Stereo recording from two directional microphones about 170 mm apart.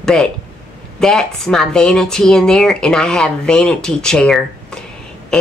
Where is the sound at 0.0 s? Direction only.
5° left (ahead or behind).